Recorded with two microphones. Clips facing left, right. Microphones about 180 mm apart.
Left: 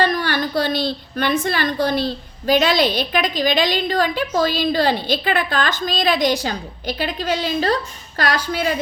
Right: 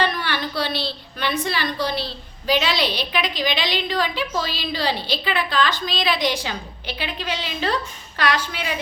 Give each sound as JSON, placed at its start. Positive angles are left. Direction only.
{"t": 0.0, "sound": "a woman's voice", "side_deg": 45}